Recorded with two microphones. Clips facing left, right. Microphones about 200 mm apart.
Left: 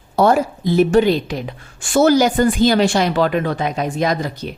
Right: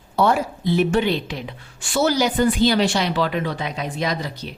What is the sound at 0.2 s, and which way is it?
Speech, 45° left (ahead or behind).